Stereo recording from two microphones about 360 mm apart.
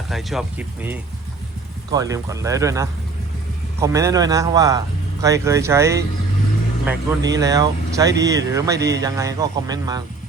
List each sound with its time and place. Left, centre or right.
0.1 s speech: centre